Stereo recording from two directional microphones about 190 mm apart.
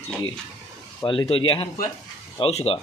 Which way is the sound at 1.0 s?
30° left (ahead or behind).